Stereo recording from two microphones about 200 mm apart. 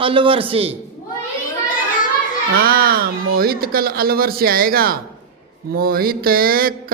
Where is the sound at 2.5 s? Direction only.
50° right (ahead or behind).